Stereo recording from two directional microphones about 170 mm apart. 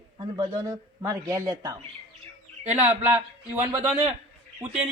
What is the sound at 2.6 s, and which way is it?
Speech, 40° right (ahead or behind).